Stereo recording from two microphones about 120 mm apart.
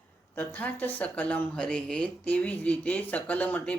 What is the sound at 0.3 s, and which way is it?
Speech, 15° left (ahead or behind).